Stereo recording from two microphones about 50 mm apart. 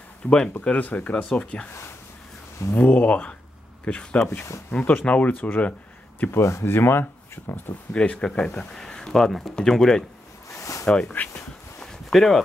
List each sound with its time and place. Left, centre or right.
0.2 s speech: left
1.1 s speech: centre
2.7 s speech: left
5.6 s a sound: left
6.3 s speech: left
6.6 s speech: left
7.9 s speech: left
10.5 s a sound: left
11.2 s speech: left
11.8 s a sound: centre